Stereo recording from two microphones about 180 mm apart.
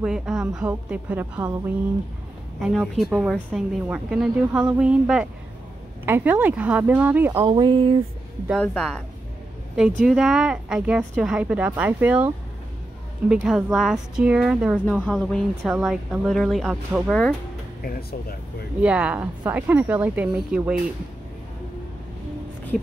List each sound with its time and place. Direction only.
0.0 s speech: 5° right (ahead or behind)
2.6 s a woman's voice: centre (ahead or behind)
7.3 s a sound: 25° right (ahead or behind)
8.5 s speech: 5° left (ahead or behind)
13.3 s speech: 5° right (ahead or behind)
18.8 s a woman's voice: 5° right (ahead or behind)